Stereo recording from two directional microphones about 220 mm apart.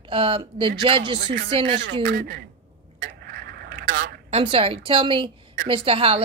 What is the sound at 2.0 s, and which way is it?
Speech, 40° right (ahead or behind).